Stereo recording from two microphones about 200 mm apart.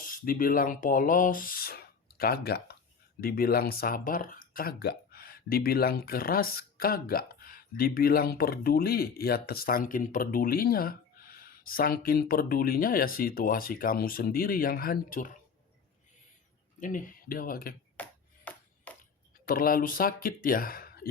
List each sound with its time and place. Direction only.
0.0 s speech: 45° left (ahead or behind)
16.8 s speech: 40° left (ahead or behind)
18.0 s ping: 5° left (ahead or behind)
18.9 s a sound: 5° left (ahead or behind)
19.5 s speech: 45° left (ahead or behind)